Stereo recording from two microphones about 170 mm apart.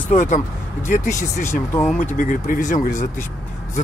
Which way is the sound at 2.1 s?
50° left (ahead or behind).